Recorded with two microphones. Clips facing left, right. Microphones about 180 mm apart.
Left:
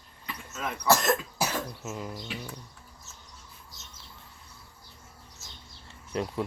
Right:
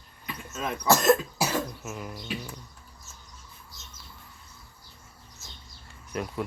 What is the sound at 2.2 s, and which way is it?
Bird, 15° right (ahead or behind).